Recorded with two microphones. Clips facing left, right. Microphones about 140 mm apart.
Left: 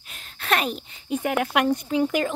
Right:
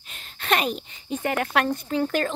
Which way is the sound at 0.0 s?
Centre (ahead or behind).